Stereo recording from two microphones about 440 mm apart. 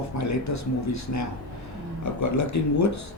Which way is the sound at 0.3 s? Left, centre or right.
Left.